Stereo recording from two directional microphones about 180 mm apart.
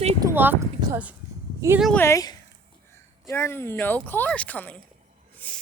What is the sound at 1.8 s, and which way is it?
Speech, centre (ahead or behind).